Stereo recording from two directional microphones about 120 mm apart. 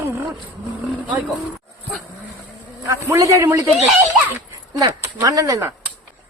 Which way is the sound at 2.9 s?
25° right (ahead or behind).